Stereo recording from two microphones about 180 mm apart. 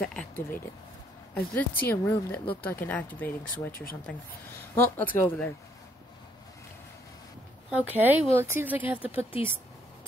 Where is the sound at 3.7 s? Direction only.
55° left (ahead or behind).